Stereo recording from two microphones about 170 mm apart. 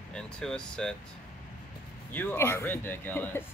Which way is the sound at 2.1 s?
10° left (ahead or behind).